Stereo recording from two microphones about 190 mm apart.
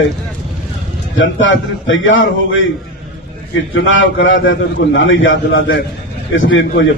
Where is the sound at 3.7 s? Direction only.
90° left.